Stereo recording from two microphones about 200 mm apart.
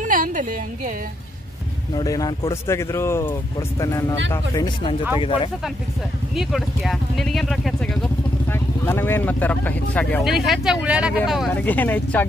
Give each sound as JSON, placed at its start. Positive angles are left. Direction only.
{"t": 0.0, "sound": "a woman's voice", "side_deg": -40}
{"t": 2.0, "sound": "speech", "side_deg": 20}
{"t": 6.3, "sound": "speech", "side_deg": 0}